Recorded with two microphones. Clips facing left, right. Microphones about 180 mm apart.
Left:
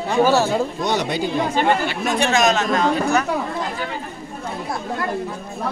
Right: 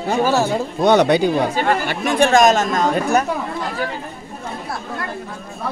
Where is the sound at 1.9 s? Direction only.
50° right (ahead or behind).